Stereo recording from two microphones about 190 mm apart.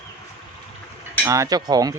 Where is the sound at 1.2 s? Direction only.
20° right (ahead or behind).